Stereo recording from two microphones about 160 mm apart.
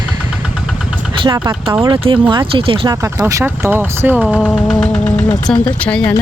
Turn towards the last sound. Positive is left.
turn(degrees=5)  # may be behind; listen again after turning